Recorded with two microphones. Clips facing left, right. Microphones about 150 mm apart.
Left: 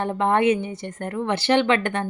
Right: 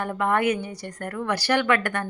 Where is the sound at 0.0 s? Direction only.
25° left (ahead or behind).